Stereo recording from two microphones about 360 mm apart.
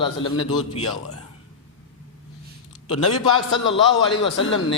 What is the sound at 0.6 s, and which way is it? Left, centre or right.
Speech, left.